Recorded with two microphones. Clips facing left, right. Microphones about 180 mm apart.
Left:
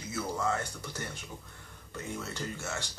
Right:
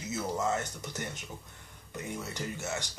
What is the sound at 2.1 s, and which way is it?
Speech, 15° right (ahead or behind).